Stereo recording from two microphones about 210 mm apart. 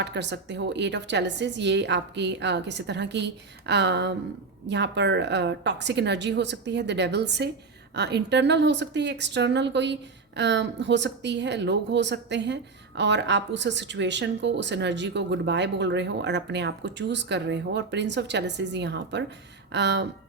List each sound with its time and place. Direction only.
0.0 s speech: 55° right (ahead or behind)